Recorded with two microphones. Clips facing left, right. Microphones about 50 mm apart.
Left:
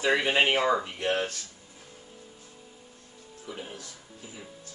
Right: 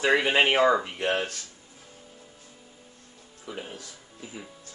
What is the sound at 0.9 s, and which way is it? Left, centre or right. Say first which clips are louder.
Music: right 1 dB; right.